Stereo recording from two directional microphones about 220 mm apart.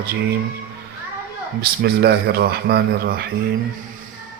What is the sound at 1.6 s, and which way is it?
Speech, 45° right (ahead or behind).